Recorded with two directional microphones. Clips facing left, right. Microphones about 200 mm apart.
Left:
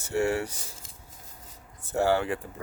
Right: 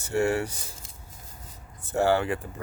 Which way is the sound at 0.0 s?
55° right (ahead or behind).